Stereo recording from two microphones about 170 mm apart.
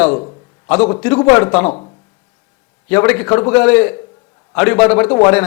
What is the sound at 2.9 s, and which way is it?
Speech, 10° left (ahead or behind).